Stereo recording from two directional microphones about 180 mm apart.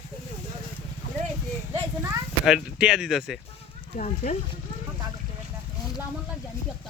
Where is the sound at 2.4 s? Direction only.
5° right (ahead or behind).